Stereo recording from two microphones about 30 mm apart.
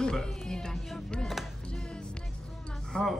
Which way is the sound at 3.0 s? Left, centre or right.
Centre.